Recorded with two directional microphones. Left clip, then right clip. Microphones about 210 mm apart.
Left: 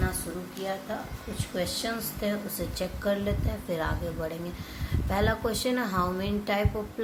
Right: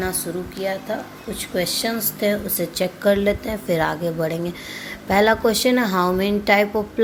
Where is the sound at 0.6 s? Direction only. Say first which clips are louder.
Right 8 dB; 35° right (ahead or behind).